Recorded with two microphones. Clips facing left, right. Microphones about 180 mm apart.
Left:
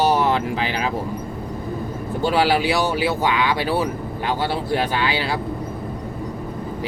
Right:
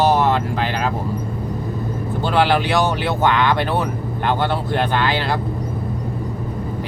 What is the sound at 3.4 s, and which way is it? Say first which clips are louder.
Speech: right 2 dB; 55° right (ahead or behind).